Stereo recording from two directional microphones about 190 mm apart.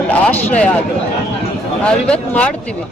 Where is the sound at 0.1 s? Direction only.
10° left (ahead or behind).